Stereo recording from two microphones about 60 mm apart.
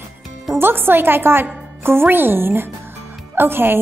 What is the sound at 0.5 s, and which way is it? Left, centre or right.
A woman's voice, right.